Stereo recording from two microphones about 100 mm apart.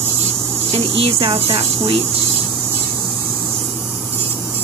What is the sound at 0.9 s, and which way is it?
Speech, 70° right (ahead or behind).